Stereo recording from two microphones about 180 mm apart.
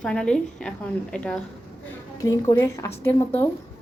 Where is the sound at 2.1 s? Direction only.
20° left (ahead or behind).